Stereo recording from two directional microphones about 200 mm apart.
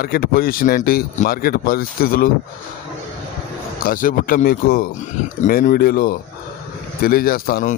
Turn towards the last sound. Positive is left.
turn(degrees=45)  # may be behind; listen again after turning